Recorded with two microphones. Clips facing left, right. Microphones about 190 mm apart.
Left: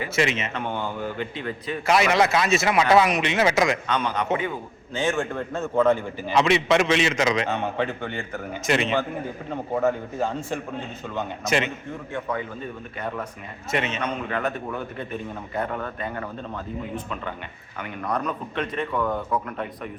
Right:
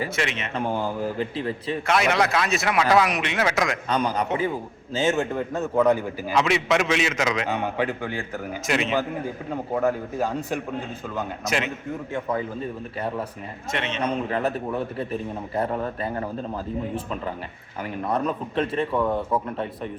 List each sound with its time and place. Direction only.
0.2 s a man's voice: centre (ahead or behind)
0.5 s a man's voice: 35° right (ahead or behind)
1.9 s a man's voice: centre (ahead or behind)
3.8 s a man's voice: 35° right (ahead or behind)
4.9 s speech: 25° right (ahead or behind)
5.8 s a man's voice: 10° right (ahead or behind)
12.3 s a man's voice: 35° right (ahead or behind)
13.7 s a man's voice: 5° left (ahead or behind)
14.0 s a man's voice: 30° right (ahead or behind)